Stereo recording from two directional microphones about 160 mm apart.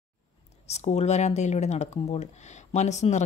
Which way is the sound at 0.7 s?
45° left (ahead or behind).